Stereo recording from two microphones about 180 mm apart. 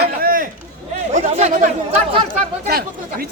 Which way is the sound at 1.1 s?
40° right (ahead or behind).